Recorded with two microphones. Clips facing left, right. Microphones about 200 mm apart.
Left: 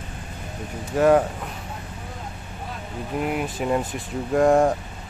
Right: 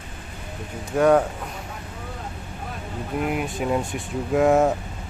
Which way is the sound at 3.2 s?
Centre (ahead or behind).